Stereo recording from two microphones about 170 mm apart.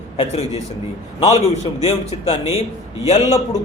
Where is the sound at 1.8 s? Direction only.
35° left (ahead or behind).